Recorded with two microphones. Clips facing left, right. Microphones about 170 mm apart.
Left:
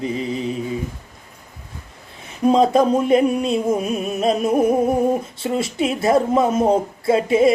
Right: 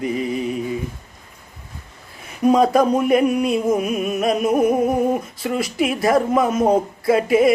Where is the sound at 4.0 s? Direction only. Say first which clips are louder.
Even; 25° left (ahead or behind).